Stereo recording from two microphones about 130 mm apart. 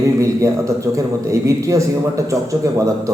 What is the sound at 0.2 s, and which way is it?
A man's voice, 25° right (ahead or behind).